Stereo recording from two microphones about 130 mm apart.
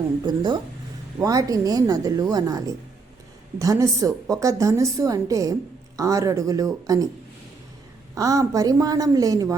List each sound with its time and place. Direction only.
0.3 s a woman's voice: 30° right (ahead or behind)
8.1 s a woman's voice: 25° right (ahead or behind)